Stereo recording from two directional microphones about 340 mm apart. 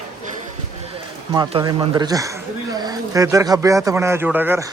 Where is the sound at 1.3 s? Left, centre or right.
Centre.